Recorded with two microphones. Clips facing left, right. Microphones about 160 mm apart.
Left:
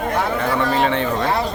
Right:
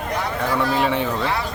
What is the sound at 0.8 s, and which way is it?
Speech, 5° right (ahead or behind).